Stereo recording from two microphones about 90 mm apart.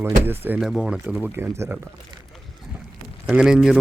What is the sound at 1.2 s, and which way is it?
Speech, 25° right (ahead or behind).